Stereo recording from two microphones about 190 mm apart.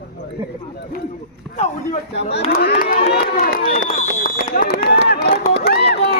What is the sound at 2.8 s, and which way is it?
Speech, 45° left (ahead or behind).